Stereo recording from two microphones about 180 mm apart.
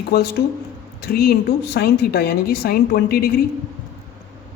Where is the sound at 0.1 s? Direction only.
60° left (ahead or behind).